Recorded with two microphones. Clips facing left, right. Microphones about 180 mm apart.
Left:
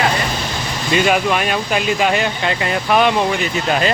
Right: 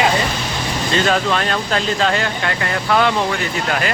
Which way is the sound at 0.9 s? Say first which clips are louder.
Left 2 dB; 15° left (ahead or behind).